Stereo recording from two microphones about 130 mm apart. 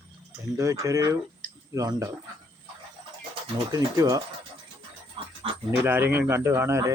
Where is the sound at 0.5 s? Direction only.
25° right (ahead or behind).